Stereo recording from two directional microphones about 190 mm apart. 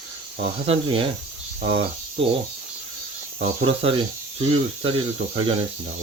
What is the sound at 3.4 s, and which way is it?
Speech, 30° right (ahead or behind).